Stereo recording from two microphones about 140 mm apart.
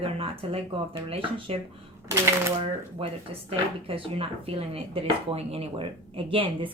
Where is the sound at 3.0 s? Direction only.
40° right (ahead or behind).